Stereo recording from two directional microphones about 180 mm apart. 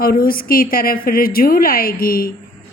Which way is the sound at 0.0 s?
55° left (ahead or behind).